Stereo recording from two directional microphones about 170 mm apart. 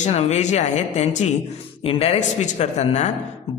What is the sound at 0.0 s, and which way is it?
A man's voice, 45° left (ahead or behind).